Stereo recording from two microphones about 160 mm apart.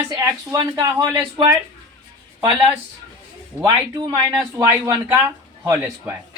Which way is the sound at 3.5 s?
25° right (ahead or behind).